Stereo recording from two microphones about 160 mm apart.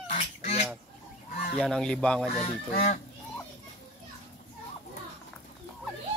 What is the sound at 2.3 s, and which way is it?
Goose, 50° left (ahead or behind).